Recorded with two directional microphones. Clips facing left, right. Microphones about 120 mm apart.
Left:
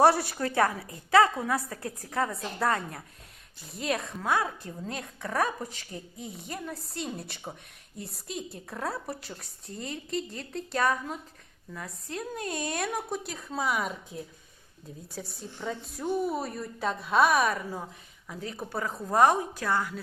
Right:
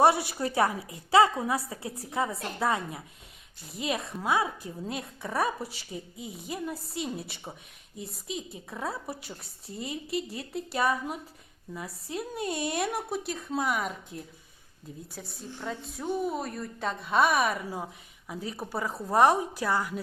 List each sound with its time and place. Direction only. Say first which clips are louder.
0.0 s a woman's voice: left 1 dB; centre (ahead or behind)
0.4 s a woman's voice: even; 15° right (ahead or behind)
1.5 s a woman's voice: even; 10° right (ahead or behind)